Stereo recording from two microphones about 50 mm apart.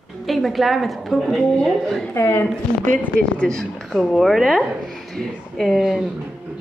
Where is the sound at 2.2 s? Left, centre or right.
Left.